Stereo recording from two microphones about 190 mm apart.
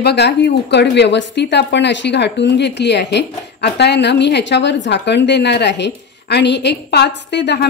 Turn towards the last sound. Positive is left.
turn(degrees=65)  # may be behind; listen again after turning